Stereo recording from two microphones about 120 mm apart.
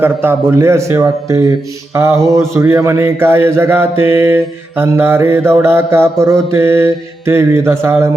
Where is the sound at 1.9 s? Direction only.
20° right (ahead or behind).